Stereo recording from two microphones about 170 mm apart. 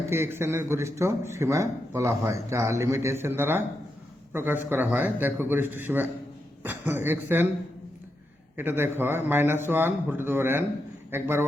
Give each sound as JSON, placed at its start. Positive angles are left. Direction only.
{"t": 0.1, "sound": "a man's voice", "side_deg": -15}
{"t": 8.5, "sound": "a man's voice", "side_deg": -15}